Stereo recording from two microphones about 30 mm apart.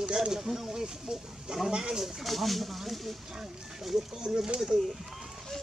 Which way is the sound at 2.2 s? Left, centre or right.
Centre.